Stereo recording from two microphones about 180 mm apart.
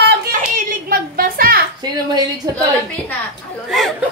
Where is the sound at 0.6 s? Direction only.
50° right (ahead or behind).